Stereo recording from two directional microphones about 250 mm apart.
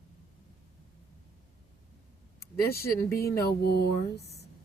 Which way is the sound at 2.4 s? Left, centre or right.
Left.